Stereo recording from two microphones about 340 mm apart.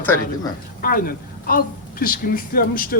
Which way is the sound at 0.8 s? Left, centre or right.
Left.